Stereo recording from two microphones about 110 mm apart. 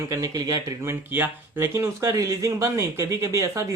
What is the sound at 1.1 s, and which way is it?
Speech, 20° right (ahead or behind).